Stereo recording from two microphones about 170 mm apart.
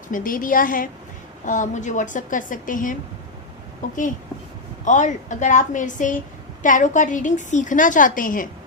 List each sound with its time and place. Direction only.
0.1 s a woman's voice: 55° left (ahead or behind)